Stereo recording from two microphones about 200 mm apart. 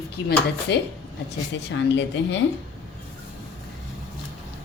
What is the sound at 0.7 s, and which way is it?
A woman's voice, 55° left (ahead or behind).